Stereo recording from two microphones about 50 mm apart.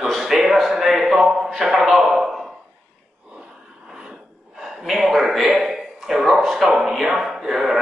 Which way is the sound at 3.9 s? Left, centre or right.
Centre.